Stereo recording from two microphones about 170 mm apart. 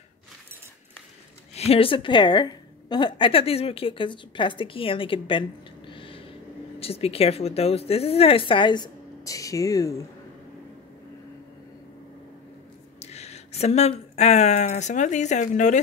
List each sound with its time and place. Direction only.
1.5 s a woman's voice: 35° left (ahead or behind)
5.9 s a sound: 30° left (ahead or behind)
6.8 s a woman's voice: 35° left (ahead or behind); by 10.0 s 20° left (ahead or behind)
13.0 s speech: 40° left (ahead or behind)